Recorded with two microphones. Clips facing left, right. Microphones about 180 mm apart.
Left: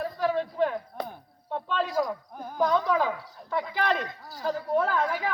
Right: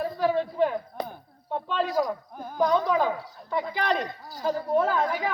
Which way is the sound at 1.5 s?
Centre (ahead or behind).